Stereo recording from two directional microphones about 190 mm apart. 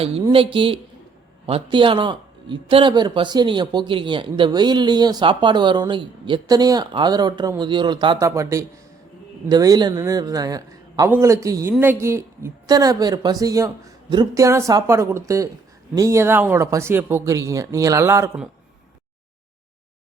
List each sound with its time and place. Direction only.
0.0 s speech: 30° right (ahead or behind); by 18.4 s 15° right (ahead or behind)